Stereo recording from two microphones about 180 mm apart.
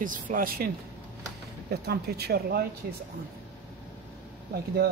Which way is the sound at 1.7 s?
60° right (ahead or behind).